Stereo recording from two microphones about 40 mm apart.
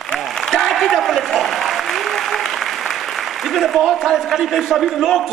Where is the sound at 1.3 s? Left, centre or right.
Centre.